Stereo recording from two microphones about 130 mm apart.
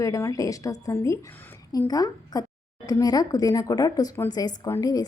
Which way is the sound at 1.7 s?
30° left (ahead or behind).